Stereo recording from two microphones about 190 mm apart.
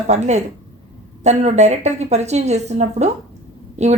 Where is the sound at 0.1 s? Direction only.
35° right (ahead or behind).